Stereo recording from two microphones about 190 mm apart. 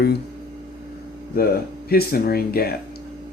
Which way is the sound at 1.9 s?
50° left (ahead or behind).